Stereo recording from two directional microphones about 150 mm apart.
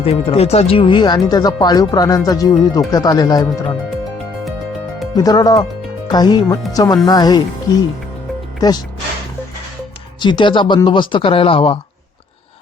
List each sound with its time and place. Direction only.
0.0 s speech: 40° left (ahead or behind)
5.1 s speech: 25° left (ahead or behind)
10.2 s speech: 30° left (ahead or behind)